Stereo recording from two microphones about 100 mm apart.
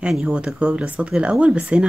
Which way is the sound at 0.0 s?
10° right (ahead or behind).